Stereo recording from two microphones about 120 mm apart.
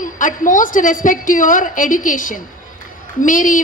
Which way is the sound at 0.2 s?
90° left.